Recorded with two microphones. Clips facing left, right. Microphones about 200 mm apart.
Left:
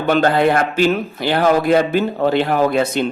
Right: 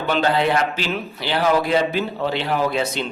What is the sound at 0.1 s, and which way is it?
A woman's voice, 50° left (ahead or behind).